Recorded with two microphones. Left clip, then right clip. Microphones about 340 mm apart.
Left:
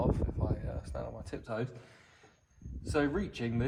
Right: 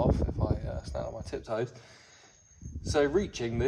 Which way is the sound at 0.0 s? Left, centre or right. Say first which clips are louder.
Right 5 dB; right.